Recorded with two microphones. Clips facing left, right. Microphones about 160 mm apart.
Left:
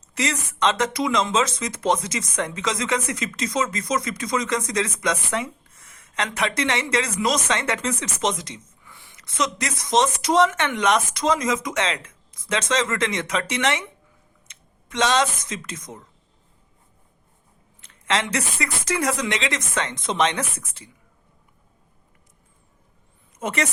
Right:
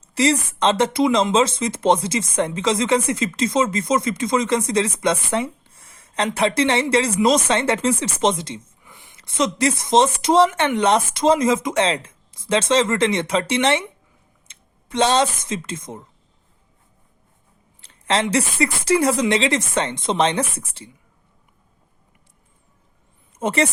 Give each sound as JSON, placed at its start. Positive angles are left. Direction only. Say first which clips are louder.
{"t": 0.1, "sound": "speech", "louder": "right 8 dB", "side_deg": -30}
{"t": 8.8, "sound": "speech", "louder": "right 1 dB", "side_deg": -20}
{"t": 17.7, "sound": "speech", "louder": "right 3 dB", "side_deg": -30}
{"t": 23.4, "sound": "a woman's voice", "louder": "right 5 dB", "side_deg": -30}